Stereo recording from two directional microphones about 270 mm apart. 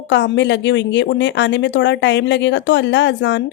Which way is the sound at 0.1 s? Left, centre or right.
Left.